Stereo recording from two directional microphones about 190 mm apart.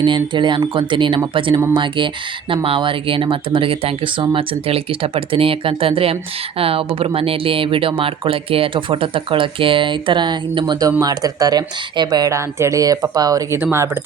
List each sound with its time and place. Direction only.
0.0 s speech: 25° right (ahead or behind)